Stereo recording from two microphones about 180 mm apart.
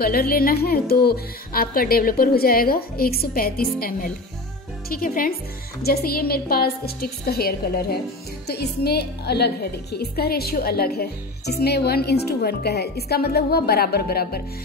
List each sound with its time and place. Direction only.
0.0 s a woman's voice: 55° left (ahead or behind)